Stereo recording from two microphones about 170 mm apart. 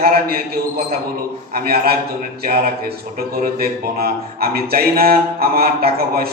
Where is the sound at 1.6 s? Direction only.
65° right (ahead or behind).